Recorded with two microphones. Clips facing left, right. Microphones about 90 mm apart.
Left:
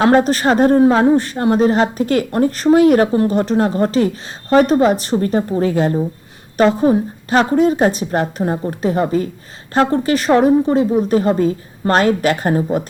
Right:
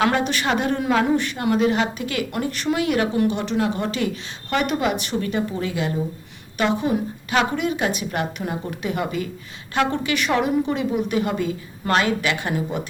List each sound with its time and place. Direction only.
0.0 s speech: 40° left (ahead or behind)